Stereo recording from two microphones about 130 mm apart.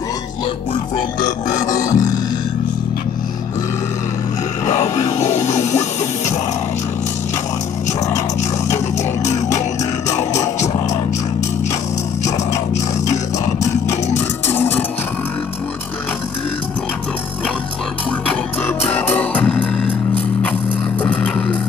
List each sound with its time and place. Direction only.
1.7 s music: 25° left (ahead or behind)
4.7 s music: 20° left (ahead or behind)
5.3 s music: 65° left (ahead or behind)
9.2 s music: 65° left (ahead or behind)
14.5 s a sound: 15° left (ahead or behind)
18.8 s music: 15° left (ahead or behind)
21.0 s music: 10° left (ahead or behind)